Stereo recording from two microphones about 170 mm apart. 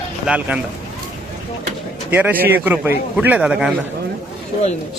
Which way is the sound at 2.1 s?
10° right (ahead or behind).